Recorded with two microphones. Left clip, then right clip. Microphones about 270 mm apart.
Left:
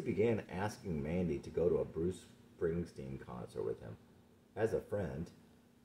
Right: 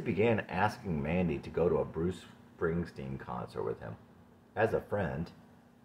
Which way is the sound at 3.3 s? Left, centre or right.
Right.